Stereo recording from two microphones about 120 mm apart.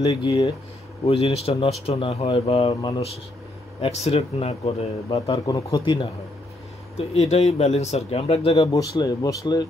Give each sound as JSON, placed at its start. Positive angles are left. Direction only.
{"t": 0.0, "sound": "speech", "side_deg": 30}
{"t": 1.0, "sound": "speech", "side_deg": 60}
{"t": 3.8, "sound": "speech", "side_deg": 60}
{"t": 5.3, "sound": "speech", "side_deg": 40}
{"t": 7.0, "sound": "speech", "side_deg": 65}
{"t": 8.7, "sound": "speech", "side_deg": 30}